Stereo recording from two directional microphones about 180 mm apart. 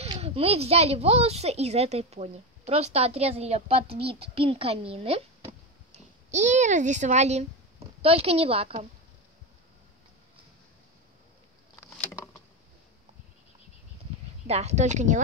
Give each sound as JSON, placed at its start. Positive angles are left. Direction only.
{"t": 0.1, "sound": "a child's voice", "side_deg": -30}
{"t": 11.7, "sound": "vehicle", "side_deg": 15}
{"t": 14.5, "sound": "a child's voice", "side_deg": -40}